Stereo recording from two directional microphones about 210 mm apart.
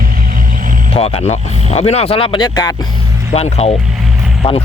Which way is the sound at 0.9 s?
30° left (ahead or behind).